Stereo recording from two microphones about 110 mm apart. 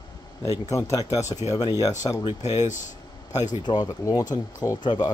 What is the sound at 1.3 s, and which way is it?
Speech, 90° left.